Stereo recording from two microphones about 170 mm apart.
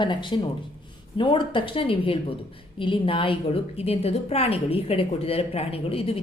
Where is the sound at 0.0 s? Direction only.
30° left (ahead or behind).